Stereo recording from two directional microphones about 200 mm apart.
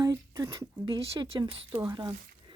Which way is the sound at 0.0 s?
15° right (ahead or behind).